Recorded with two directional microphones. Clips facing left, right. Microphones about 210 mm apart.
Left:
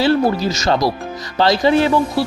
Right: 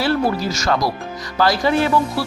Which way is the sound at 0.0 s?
25° left (ahead or behind).